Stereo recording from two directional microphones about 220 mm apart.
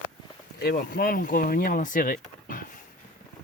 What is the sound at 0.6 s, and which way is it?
Speech, 45° left (ahead or behind).